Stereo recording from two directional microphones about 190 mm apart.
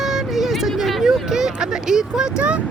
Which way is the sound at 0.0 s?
Centre (ahead or behind).